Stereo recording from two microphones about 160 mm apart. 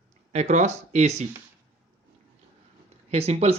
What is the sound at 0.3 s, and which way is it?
Speech, 45° right (ahead or behind).